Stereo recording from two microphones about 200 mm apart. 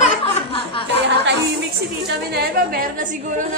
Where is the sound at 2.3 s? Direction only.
50° right (ahead or behind).